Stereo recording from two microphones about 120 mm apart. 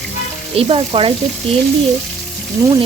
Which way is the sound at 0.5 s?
50° right (ahead or behind).